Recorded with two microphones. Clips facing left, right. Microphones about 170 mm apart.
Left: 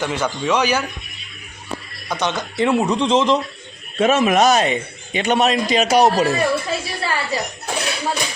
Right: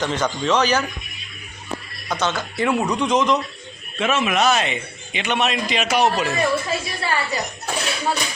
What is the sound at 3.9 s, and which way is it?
Speech, 40° left (ahead or behind).